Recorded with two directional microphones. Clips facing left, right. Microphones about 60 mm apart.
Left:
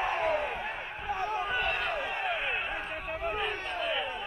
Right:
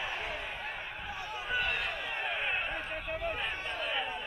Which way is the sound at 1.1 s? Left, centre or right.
Left.